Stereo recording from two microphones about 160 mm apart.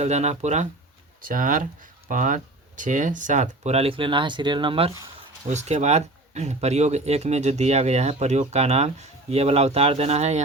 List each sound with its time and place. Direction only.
0.0 s speech: 45° right (ahead or behind)
1.2 s speech: 55° right (ahead or behind); by 4.9 s 30° right (ahead or behind)
5.5 s speech: 45° right (ahead or behind)